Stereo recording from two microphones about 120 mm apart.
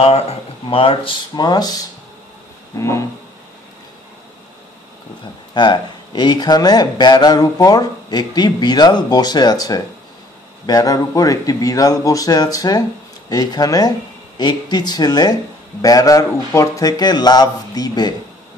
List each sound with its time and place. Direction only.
0.0 s speech: 55° left (ahead or behind)
1.3 s speech: 35° left (ahead or behind)
5.5 s speech: 40° left (ahead or behind)